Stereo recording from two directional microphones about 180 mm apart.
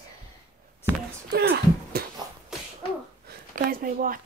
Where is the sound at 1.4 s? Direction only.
75° right (ahead or behind).